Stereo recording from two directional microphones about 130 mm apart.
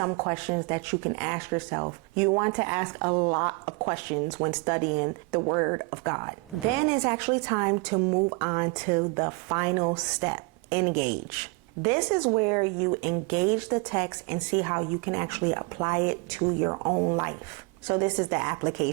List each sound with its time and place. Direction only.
0.0 s speech: 25° right (ahead or behind)